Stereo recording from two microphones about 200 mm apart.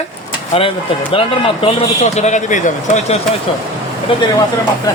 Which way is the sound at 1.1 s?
25° left (ahead or behind).